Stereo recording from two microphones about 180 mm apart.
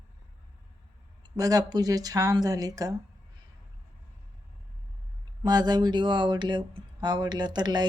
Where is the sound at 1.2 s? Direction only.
20° right (ahead or behind).